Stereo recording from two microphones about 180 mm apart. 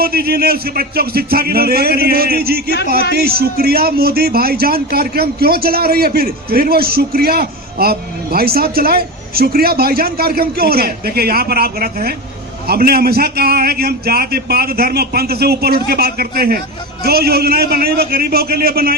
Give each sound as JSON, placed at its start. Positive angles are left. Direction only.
{"t": 0.0, "sound": "a man's voice", "side_deg": -60}